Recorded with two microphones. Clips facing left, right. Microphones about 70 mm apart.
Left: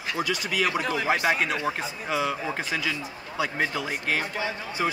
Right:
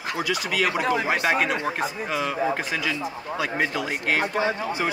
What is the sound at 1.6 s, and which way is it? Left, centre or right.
Speech, centre.